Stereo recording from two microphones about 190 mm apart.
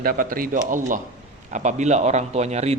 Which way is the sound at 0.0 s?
50° right (ahead or behind).